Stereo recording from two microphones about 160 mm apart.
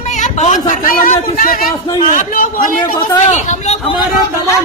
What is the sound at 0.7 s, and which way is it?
Speech, 60° left (ahead or behind).